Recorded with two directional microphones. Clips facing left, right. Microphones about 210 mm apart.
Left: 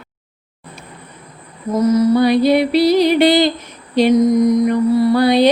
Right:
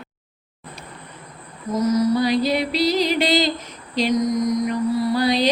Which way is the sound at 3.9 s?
60° left (ahead or behind).